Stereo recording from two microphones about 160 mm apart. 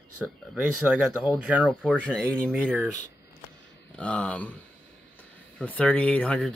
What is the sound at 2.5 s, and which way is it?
Speech, 10° right (ahead or behind).